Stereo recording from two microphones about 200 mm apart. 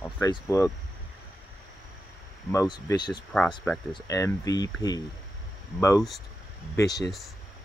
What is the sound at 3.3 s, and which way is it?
Speech, 5° left (ahead or behind).